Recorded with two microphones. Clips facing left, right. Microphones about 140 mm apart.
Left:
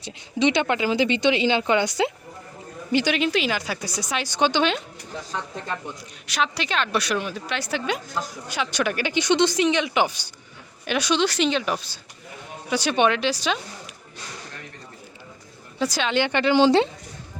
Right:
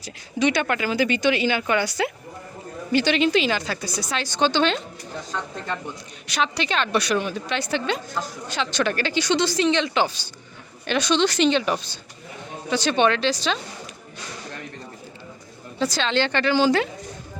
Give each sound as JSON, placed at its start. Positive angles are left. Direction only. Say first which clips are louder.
{"t": 0.0, "sound": "a woman's voice", "louder": "left 1 dB", "side_deg": 20}
{"t": 6.2, "sound": "a woman's voice", "louder": "right 1 dB", "side_deg": 0}
{"t": 15.8, "sound": "a woman's voice", "louder": "even", "side_deg": 10}